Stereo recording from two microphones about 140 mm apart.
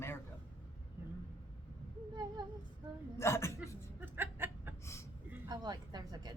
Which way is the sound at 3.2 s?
20° left (ahead or behind).